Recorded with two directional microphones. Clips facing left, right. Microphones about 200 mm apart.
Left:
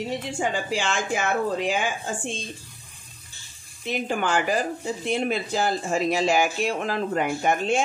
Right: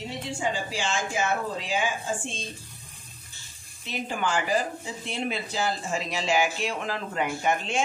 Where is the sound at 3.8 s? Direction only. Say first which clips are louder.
Left 4 dB; 55° left (ahead or behind).